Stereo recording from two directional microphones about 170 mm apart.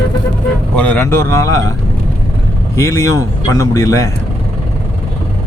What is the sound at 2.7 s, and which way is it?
Speech, 15° left (ahead or behind).